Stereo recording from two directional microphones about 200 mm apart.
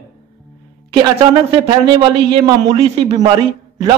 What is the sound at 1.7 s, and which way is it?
A man's voice, 20° right (ahead or behind).